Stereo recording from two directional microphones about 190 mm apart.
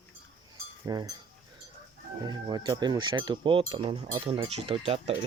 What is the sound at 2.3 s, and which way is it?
Speech, 20° right (ahead or behind).